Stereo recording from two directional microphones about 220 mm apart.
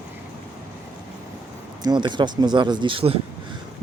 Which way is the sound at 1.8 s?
20° right (ahead or behind).